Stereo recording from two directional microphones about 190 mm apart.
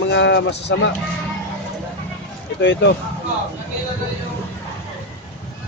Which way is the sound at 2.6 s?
65° left (ahead or behind).